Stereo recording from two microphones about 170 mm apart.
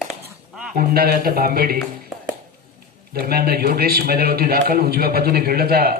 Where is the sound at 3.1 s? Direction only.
65° right (ahead or behind).